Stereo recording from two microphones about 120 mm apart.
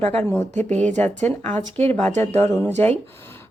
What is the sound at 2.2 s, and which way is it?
Speech, 25° left (ahead or behind).